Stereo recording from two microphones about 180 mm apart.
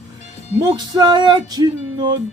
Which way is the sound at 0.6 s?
25° right (ahead or behind).